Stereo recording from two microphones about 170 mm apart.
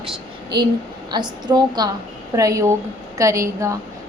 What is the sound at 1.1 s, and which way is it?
A woman's voice, 25° right (ahead or behind).